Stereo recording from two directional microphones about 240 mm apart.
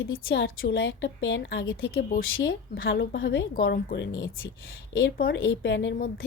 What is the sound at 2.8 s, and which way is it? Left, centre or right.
A woman's voice, left.